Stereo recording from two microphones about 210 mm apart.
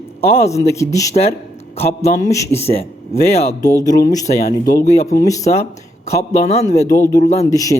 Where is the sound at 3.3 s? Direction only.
30° left (ahead or behind).